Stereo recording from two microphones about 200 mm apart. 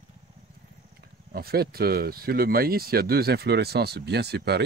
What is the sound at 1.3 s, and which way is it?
Speech, 50° right (ahead or behind).